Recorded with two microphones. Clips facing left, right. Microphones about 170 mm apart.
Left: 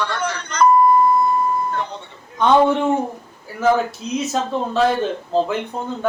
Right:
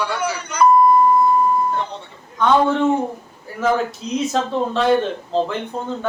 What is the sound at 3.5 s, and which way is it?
Speech, centre (ahead or behind).